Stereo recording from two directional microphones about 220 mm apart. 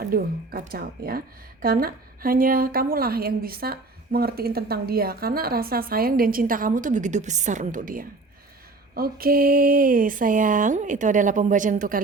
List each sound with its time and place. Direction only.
0.0 s a woman's voice: 40° right (ahead or behind)